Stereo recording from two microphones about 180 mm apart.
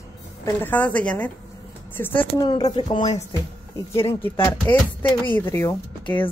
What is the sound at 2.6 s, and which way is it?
Speech, 25° left (ahead or behind).